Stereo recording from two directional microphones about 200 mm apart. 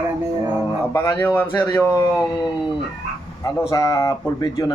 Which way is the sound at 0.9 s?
10° left (ahead or behind).